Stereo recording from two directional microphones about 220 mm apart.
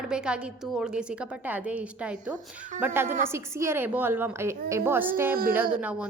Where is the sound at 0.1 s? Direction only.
5° right (ahead or behind).